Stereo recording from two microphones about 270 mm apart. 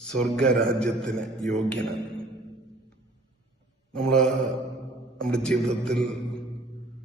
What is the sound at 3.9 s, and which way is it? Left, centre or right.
A man's voice, centre.